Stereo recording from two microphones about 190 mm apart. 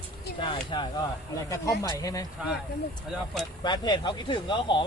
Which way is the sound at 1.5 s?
15° left (ahead or behind).